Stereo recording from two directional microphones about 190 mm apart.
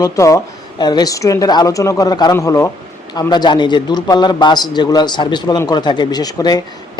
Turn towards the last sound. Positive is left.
turn(degrees=20)  # may be behind; listen again after turning